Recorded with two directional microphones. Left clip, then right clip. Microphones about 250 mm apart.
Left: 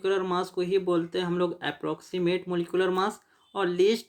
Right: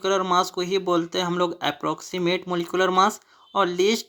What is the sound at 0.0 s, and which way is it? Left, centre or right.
Speech, centre.